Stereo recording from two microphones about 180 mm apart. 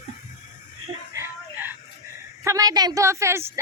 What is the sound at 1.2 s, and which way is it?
Music, 10° right (ahead or behind).